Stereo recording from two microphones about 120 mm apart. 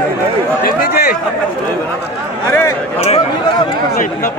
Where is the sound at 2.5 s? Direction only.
25° left (ahead or behind).